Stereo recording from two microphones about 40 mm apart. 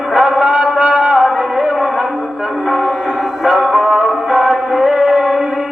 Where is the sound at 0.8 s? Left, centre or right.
Right.